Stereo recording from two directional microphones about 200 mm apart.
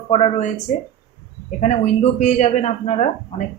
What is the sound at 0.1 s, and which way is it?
Speech, 35° left (ahead or behind).